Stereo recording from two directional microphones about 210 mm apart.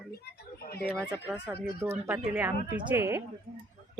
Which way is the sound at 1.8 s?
10° right (ahead or behind).